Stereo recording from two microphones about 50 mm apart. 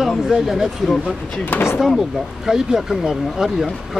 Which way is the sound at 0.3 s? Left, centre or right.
Centre.